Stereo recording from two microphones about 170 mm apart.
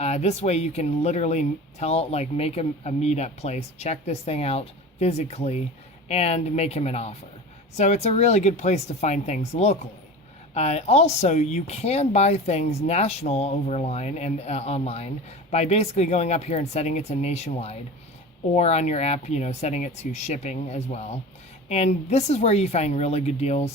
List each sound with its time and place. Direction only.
0.0 s speech: 40° left (ahead or behind)